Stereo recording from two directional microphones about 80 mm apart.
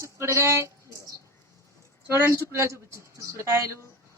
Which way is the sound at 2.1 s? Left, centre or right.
Right.